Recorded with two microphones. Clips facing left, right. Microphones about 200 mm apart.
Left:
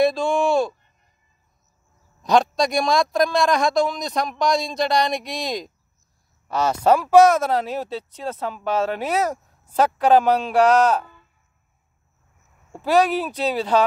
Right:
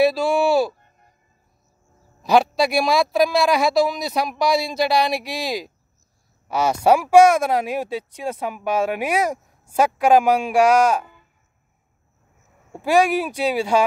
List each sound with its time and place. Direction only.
0.0 s speech: 5° right (ahead or behind)
0.7 s a sound: 50° right (ahead or behind)
2.2 s speech: 5° right (ahead or behind)
12.7 s speech: 10° right (ahead or behind)